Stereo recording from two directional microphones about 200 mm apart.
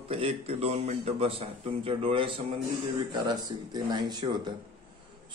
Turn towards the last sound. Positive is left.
turn(degrees=-20)  # may be behind; listen again after turning